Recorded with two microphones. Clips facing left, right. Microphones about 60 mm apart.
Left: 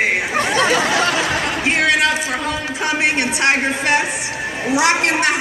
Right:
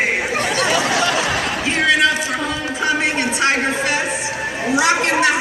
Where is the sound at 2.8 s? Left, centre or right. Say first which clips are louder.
Even; left.